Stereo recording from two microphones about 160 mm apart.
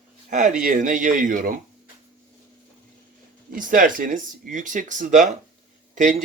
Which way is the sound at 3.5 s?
60° right (ahead or behind).